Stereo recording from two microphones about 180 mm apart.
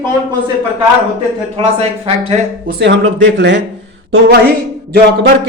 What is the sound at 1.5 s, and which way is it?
Speech, 35° right (ahead or behind).